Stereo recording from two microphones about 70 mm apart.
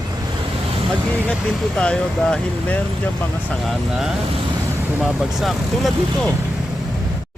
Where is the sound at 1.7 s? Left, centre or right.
Centre.